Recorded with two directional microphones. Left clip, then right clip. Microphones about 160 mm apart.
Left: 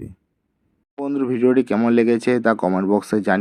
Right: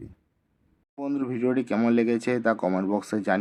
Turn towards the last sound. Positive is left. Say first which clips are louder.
# left 7 dB
turn(degrees=30)  # may be behind; listen again after turning